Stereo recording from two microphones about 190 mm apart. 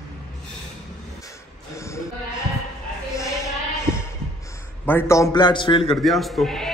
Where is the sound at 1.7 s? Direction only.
15° left (ahead or behind).